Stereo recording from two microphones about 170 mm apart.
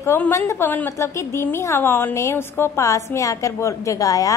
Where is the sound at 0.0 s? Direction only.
15° left (ahead or behind).